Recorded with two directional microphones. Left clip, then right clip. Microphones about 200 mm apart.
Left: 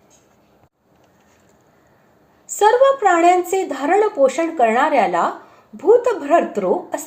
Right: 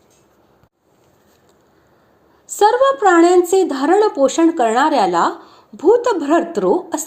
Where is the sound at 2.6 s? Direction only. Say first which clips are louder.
Even; 40° right (ahead or behind).